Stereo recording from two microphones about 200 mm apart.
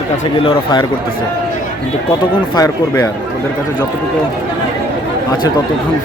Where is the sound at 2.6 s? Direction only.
20° left (ahead or behind).